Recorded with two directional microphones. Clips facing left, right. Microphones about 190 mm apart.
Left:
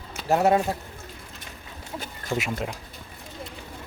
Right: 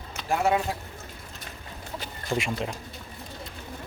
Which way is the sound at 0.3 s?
40° left (ahead or behind).